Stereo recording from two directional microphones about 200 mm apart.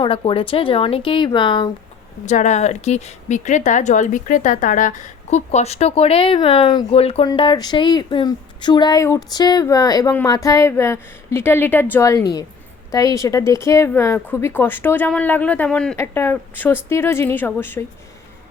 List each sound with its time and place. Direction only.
0.0 s speech: 25° left (ahead or behind)
2.2 s speech: 35° left (ahead or behind); by 17.8 s 10° left (ahead or behind)